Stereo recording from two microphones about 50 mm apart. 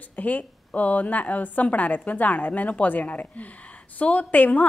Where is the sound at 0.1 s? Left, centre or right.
Left.